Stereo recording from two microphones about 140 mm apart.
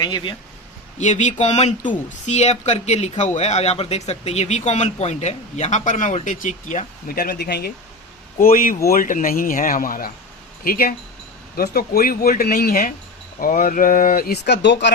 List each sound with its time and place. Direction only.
0.0 s speech: 30° left (ahead or behind)
0.9 s speech: 55° left (ahead or behind); by 12.9 s 90° left
13.4 s speech: 70° left (ahead or behind)